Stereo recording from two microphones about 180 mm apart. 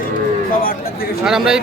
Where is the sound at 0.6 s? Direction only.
55° left (ahead or behind).